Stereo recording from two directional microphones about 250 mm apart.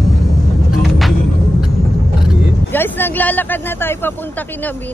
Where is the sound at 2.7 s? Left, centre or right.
Centre.